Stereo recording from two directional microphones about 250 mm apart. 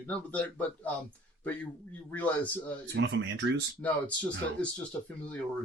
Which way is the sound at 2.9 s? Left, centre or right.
Right.